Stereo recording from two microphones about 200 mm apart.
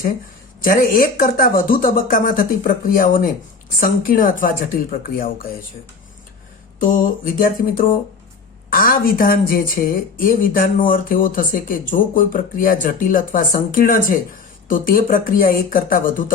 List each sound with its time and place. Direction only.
0.6 s speech: 45° left (ahead or behind)
6.7 s speech: 45° left (ahead or behind)